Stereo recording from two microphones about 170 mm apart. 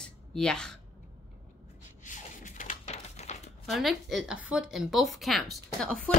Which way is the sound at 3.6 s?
Centre (ahead or behind).